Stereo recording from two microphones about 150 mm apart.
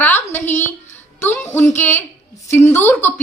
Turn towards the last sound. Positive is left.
turn(degrees=15)  # may be behind; listen again after turning